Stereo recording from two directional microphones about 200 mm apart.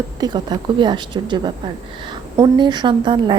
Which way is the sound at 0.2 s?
20° right (ahead or behind).